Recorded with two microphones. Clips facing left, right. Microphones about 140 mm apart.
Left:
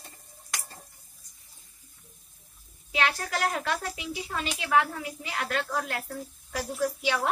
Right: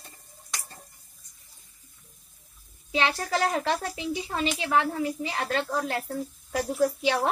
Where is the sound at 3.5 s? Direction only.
30° right (ahead or behind).